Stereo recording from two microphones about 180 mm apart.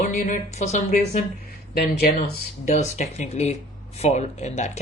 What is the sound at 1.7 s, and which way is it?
Speech, 60° left (ahead or behind).